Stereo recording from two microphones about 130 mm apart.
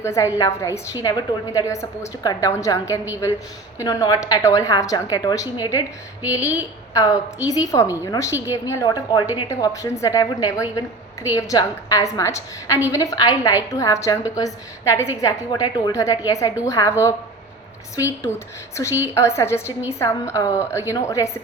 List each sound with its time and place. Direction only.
0.0 s a woman's voice: 20° left (ahead or behind)
6.4 s a woman's voice: 10° right (ahead or behind)
6.9 s a woman's voice: 25° left (ahead or behind)
17.9 s a woman's voice: 25° left (ahead or behind)